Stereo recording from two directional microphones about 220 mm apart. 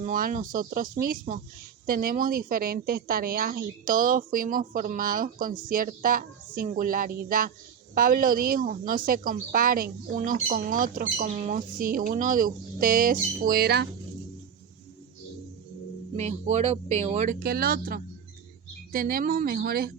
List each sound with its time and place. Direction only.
0.0 s a woman's voice: 40° right (ahead or behind)
16.1 s a woman's voice: 30° right (ahead or behind)
17.4 s a woman's voice: 45° right (ahead or behind)